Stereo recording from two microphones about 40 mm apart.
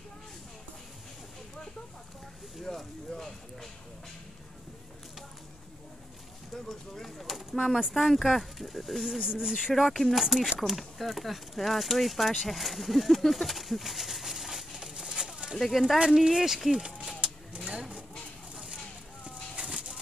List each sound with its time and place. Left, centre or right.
2.6 s speech: centre
6.5 s speech: centre
7.9 s speech: centre
9.2 s speech: centre
9.9 s speech: centre
10.2 s speech: centre
14.8 s a sound: centre
15.5 s speech: centre
16.7 s speech: centre
18.5 s a sound: centre
19.2 s a sound: right